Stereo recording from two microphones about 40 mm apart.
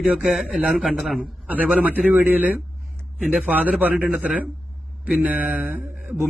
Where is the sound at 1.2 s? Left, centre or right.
Right.